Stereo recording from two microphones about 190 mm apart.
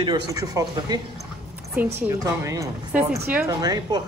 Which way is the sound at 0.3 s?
20° right (ahead or behind).